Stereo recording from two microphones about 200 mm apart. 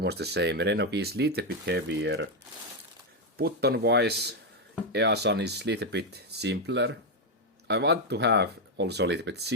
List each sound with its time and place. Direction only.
0.0 s speech: 55° right (ahead or behind)
3.3 s speech: 50° right (ahead or behind)